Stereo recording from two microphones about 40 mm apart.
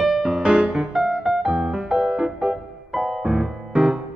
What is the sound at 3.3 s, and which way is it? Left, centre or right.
Music, right.